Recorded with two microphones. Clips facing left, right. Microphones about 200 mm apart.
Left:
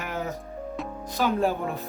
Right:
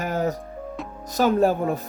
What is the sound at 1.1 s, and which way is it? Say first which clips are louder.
Speech: right 6 dB; 50° right (ahead or behind).